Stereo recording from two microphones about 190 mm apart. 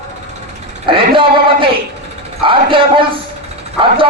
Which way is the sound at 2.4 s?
25° right (ahead or behind).